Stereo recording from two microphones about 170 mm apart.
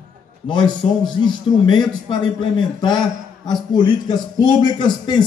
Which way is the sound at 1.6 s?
25° left (ahead or behind).